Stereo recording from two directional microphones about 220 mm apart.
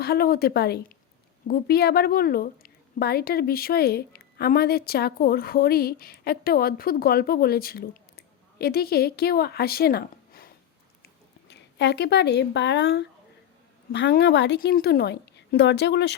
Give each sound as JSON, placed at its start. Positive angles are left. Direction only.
{"t": 0.0, "sound": "a woman's voice", "side_deg": 45}
{"t": 11.0, "sound": "a sound", "side_deg": 50}
{"t": 13.9, "sound": "a woman's voice", "side_deg": 50}